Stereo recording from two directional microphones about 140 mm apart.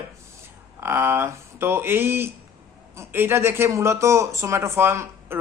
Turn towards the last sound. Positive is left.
turn(degrees=-20)  # may be behind; listen again after turning